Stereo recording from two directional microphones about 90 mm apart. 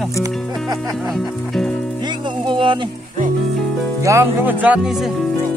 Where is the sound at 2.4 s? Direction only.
65° right (ahead or behind).